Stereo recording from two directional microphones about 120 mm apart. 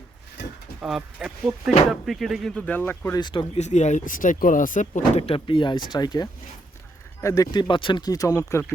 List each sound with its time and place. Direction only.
0.8 s speech: 5° right (ahead or behind); by 3.2 s 15° left (ahead or behind)
3.2 s speech: 40° left (ahead or behind)
3.5 s speech: 75° left (ahead or behind); by 5.2 s 90° left
5.2 s speech: 50° left (ahead or behind)
7.2 s speech: 25° left (ahead or behind)
7.5 s speech: 40° left (ahead or behind)